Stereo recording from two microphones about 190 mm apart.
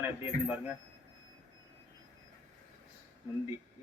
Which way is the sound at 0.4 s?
10° right (ahead or behind).